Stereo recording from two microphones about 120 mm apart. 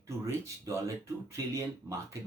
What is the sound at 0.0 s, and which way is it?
Speech, 25° right (ahead or behind).